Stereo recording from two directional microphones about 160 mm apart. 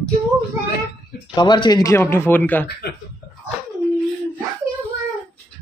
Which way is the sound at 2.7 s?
80° left.